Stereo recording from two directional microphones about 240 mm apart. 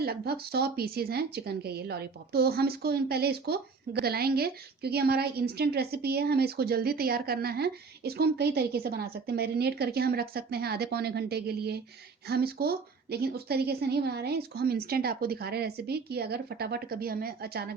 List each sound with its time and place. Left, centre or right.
0.0 s speech: right